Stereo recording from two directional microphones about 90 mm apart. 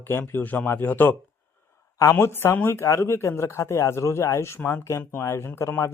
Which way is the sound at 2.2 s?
25° left (ahead or behind).